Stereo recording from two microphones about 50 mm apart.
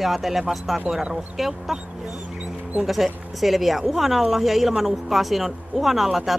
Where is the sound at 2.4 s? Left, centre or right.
Right.